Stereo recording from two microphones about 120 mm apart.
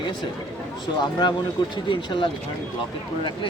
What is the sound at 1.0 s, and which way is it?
Speech, 40° left (ahead or behind).